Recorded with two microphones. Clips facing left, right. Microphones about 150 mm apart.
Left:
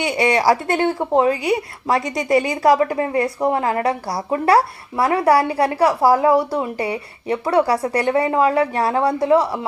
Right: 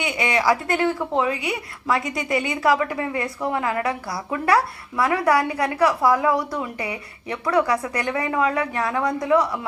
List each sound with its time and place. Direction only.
0.0 s a woman's voice: 30° left (ahead or behind)